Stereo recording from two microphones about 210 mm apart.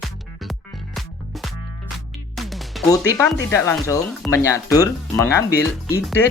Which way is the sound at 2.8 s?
15° left (ahead or behind).